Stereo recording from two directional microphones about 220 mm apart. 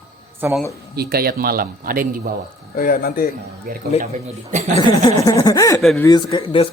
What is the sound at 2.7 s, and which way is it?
Speech, 40° left (ahead or behind).